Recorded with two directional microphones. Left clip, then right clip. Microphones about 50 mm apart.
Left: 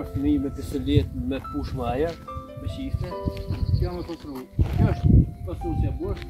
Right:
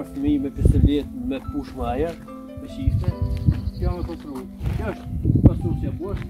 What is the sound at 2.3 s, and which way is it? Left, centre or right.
Speech, centre.